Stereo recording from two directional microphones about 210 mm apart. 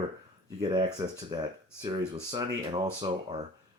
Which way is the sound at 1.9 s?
20° right (ahead or behind).